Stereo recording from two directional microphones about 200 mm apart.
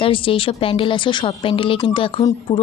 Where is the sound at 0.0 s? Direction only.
25° left (ahead or behind).